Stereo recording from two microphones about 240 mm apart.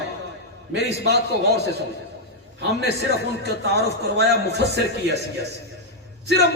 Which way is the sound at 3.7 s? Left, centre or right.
Right.